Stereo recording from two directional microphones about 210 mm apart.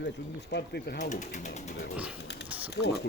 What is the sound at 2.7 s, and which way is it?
Speech, 50° left (ahead or behind).